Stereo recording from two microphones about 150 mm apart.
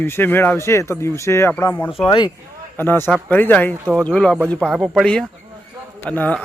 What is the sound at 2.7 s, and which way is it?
A man's voice, 15° left (ahead or behind).